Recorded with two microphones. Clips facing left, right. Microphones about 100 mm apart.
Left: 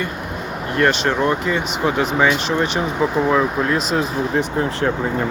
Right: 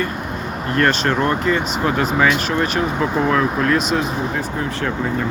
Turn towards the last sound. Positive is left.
turn(degrees=20)  # may be behind; listen again after turning